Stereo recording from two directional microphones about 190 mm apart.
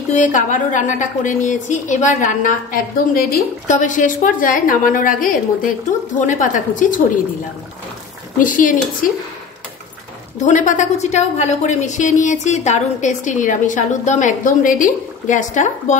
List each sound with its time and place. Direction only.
0.1 s a woman's voice: 40° left (ahead or behind)
8.4 s a woman's voice: 45° left (ahead or behind)
10.4 s a woman's voice: 40° left (ahead or behind)